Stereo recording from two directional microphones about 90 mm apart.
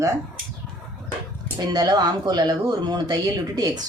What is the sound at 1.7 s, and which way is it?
A woman's voice, 45° right (ahead or behind).